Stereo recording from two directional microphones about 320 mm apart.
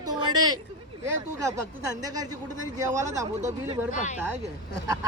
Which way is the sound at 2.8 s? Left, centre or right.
Centre.